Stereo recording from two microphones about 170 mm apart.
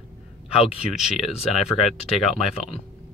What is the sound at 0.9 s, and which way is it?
Speech, centre (ahead or behind).